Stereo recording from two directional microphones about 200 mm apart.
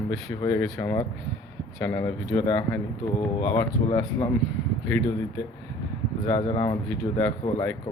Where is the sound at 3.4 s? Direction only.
30° left (ahead or behind).